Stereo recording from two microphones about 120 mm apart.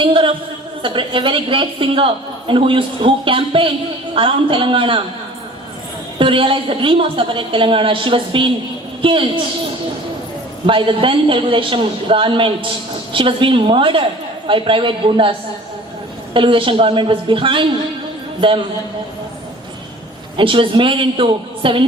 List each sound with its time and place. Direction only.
0.0 s a woman's voice: 45° right (ahead or behind)
6.1 s a woman's voice: 45° right (ahead or behind)
10.7 s a woman's voice: 45° right (ahead or behind)
20.3 s a woman's voice: 45° right (ahead or behind)